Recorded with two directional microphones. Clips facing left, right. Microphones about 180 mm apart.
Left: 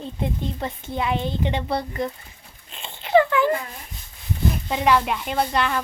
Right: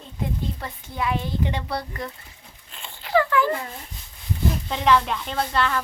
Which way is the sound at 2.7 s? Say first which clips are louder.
Left 4 dB; 20° left (ahead or behind).